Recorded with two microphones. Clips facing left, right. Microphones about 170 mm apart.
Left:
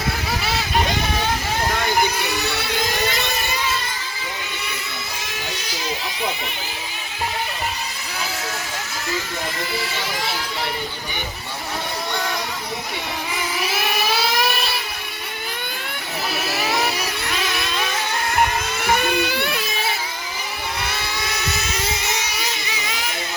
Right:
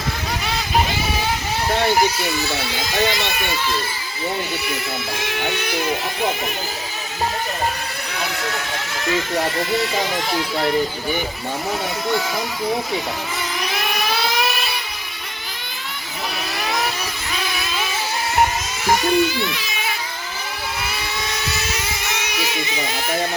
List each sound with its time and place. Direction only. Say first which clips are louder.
0.4 s vehicle: right 1 dB; centre (ahead or behind)
1.7 s vehicle: right 5 dB; 35° right (ahead or behind)
5.3 s a sound: right 9 dB; 65° right (ahead or behind)
13.6 s vehicle: left 1 dB; 5° left (ahead or behind)
16.5 s vehicle: left 1 dB; 5° left (ahead or behind)
18.9 s a sound: right 7 dB; 60° left (ahead or behind)